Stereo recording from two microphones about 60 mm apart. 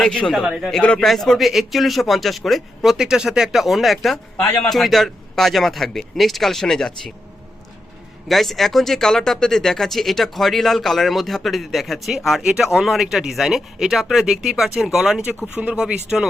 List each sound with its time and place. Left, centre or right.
0.0 s a man's voice: centre
0.4 s speech: centre
0.7 s a man's voice: centre
0.9 s speech: centre
8.3 s speech: centre
15.5 s speech: centre